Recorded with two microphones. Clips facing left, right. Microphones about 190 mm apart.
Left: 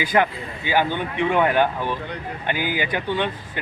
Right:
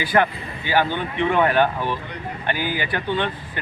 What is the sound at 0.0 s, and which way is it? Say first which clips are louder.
Speech: even; 15° left (ahead or behind).